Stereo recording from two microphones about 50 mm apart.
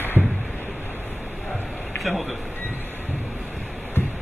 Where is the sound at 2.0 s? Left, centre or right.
Centre.